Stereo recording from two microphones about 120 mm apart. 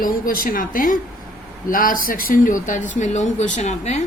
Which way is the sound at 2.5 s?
90° left.